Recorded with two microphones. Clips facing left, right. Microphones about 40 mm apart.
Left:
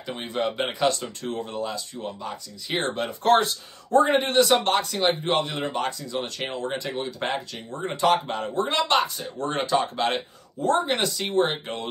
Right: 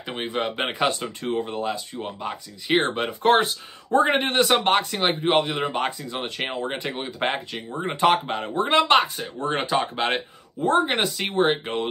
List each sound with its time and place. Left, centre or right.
0.0 s speech: right